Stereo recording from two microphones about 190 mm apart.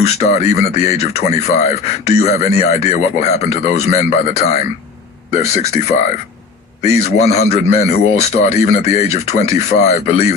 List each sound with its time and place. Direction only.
0.0 s speech: 35° left (ahead or behind)